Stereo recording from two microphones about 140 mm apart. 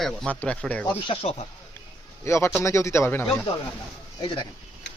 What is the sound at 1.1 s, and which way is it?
Speech, 45° left (ahead or behind).